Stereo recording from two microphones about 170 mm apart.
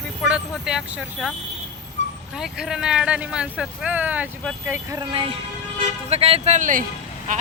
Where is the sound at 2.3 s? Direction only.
5° right (ahead or behind).